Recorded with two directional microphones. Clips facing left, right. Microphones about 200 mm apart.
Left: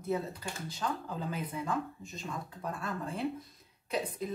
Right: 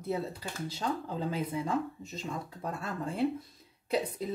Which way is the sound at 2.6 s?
30° right (ahead or behind).